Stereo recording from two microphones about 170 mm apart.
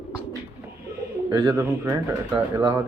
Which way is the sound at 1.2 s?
20° right (ahead or behind).